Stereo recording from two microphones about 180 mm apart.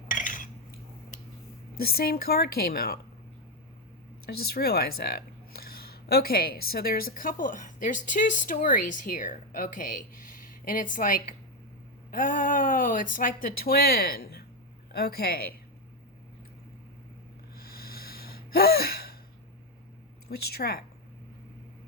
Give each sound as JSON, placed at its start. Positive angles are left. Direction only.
{"t": 0.1, "sound": "cutlery", "side_deg": 45}
{"t": 1.8, "sound": "a woman's voice", "side_deg": 55}
{"t": 4.3, "sound": "a woman's voice", "side_deg": 60}
{"t": 17.6, "sound": "a sound", "side_deg": 55}
{"t": 20.3, "sound": "a woman's voice", "side_deg": 60}